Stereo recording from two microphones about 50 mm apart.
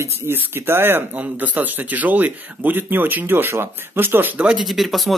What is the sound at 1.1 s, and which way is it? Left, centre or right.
Speech, right.